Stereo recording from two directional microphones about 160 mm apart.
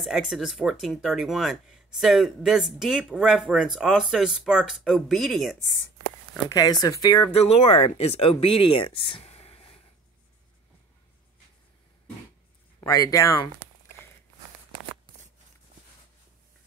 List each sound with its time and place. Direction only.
0.0 s speech: centre (ahead or behind)
6.3 s speech: 25° left (ahead or behind)
7.3 s speech: 40° left (ahead or behind)
12.8 s speech: 20° left (ahead or behind)